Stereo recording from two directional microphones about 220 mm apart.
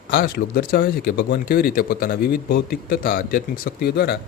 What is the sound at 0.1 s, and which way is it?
Speech, 40° left (ahead or behind).